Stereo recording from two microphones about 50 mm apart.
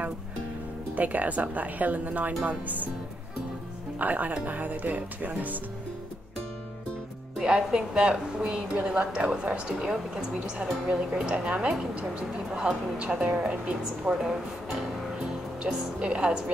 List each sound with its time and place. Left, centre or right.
0.9 s speech: right
4.0 s speech: right
7.3 s a woman's voice: centre
15.6 s speech: centre